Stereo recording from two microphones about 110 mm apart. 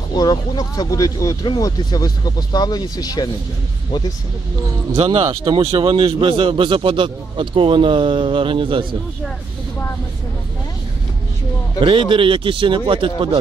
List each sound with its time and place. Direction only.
0.1 s speech: 40° left (ahead or behind)
4.9 s a man's voice: 65° right (ahead or behind)
11.8 s a man's voice: 50° right (ahead or behind)